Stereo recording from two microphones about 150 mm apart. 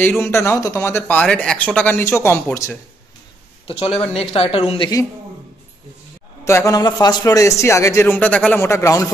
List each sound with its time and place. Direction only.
0.2 s speech: 20° left (ahead or behind)
3.6 s speech: 40° left (ahead or behind)
4.0 s speech: 5° left (ahead or behind)
4.3 s speech: 35° left (ahead or behind)
6.4 s a man's voice: 20° left (ahead or behind)